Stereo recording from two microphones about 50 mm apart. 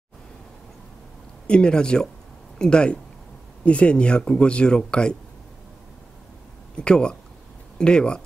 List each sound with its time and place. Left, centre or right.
1.5 s speech: centre
6.8 s speech: centre